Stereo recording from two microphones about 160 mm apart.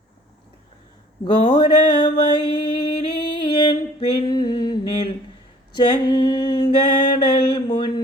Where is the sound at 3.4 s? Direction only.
30° left (ahead or behind).